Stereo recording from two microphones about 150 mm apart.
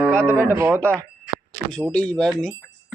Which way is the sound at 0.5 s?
15° right (ahead or behind).